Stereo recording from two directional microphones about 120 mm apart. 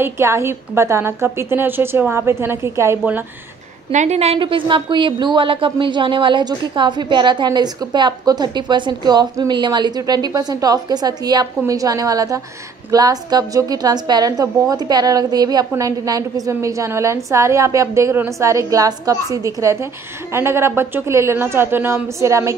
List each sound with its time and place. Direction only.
0.0 s a woman's voice: 20° right (ahead or behind)
3.9 s a woman's voice: 75° right (ahead or behind)
4.4 s a woman's voice: 45° right (ahead or behind); by 22.5 s 25° right (ahead or behind)